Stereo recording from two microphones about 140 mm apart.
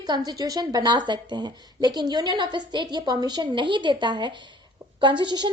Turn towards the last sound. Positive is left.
turn(degrees=-35)  # may be behind; listen again after turning